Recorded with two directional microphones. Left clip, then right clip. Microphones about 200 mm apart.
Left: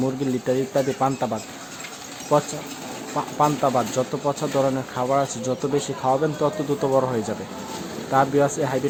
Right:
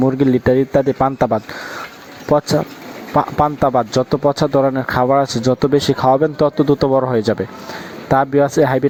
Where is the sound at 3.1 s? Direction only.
40° right (ahead or behind).